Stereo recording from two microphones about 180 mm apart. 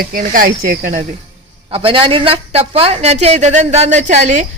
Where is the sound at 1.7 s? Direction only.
30° right (ahead or behind).